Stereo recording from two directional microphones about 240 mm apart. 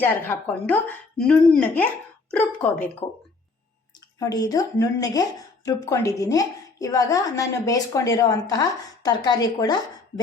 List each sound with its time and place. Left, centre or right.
0.0 s a woman's voice: centre
4.2 s speech: centre